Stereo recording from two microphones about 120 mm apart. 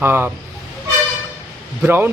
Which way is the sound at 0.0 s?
20° right (ahead or behind).